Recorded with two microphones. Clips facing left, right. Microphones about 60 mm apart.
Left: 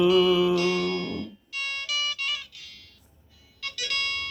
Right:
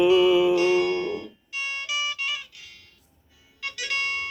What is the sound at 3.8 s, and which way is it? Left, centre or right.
Music, right.